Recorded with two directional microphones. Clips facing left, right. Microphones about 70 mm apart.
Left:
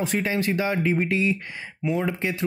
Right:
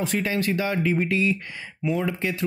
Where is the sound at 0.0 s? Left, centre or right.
Centre.